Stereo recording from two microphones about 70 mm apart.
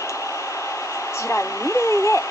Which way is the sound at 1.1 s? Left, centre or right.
Left.